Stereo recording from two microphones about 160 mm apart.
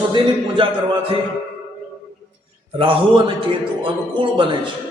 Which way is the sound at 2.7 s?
30° right (ahead or behind).